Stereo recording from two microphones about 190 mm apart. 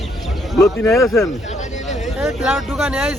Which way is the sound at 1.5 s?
40° left (ahead or behind).